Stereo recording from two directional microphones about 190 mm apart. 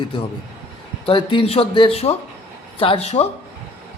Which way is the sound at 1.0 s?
25° left (ahead or behind).